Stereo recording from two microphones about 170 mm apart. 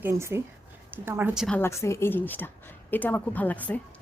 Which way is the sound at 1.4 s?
5° left (ahead or behind).